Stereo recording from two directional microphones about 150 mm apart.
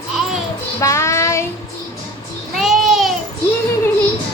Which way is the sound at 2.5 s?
Centre (ahead or behind).